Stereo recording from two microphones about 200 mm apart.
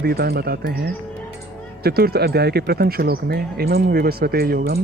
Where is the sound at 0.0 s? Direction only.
50° right (ahead or behind).